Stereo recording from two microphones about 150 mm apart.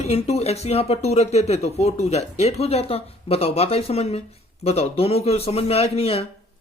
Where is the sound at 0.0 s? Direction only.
45° left (ahead or behind).